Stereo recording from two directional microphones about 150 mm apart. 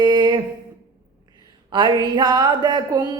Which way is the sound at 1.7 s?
30° right (ahead or behind).